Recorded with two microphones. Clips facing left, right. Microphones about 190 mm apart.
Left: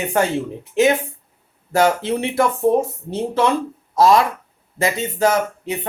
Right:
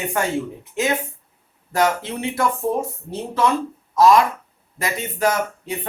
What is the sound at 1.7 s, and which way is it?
Speech, 30° left (ahead or behind).